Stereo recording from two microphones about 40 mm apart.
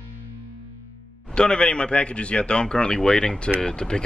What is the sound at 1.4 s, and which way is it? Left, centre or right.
A man's voice, left.